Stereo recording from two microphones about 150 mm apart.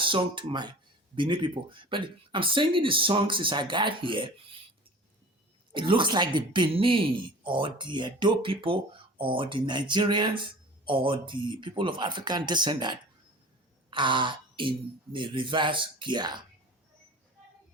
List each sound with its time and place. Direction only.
0.0 s speech: 35° right (ahead or behind)
5.7 s speech: 35° right (ahead or behind)